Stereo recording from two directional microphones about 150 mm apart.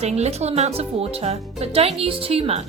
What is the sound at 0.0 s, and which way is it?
Speech, 45° right (ahead or behind).